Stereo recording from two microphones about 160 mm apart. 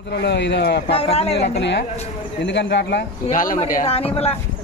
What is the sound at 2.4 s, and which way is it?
Speech, 90° left.